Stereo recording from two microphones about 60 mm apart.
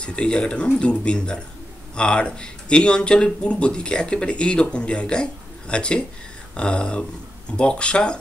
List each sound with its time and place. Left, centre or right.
0.0 s speech: centre